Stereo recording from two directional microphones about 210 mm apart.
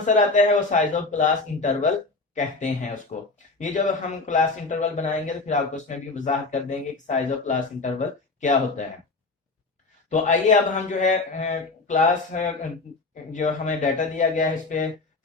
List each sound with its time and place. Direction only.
0.0 s speech: 35° left (ahead or behind)
10.1 s speech: 35° left (ahead or behind)